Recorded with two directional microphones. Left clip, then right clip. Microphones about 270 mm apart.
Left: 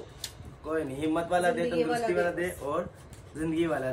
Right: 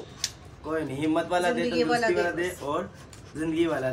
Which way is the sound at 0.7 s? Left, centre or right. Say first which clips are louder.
Right 2 dB; centre.